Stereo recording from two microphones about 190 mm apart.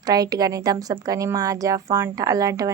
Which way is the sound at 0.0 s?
20° right (ahead or behind).